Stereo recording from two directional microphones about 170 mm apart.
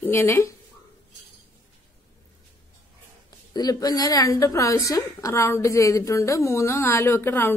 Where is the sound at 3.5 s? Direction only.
20° left (ahead or behind).